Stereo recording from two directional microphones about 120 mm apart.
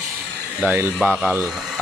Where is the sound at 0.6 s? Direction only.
15° right (ahead or behind).